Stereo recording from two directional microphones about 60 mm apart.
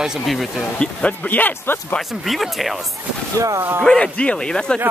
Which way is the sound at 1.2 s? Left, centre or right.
Left.